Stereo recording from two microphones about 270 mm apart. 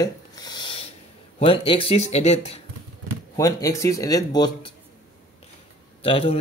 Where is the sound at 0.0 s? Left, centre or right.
Centre.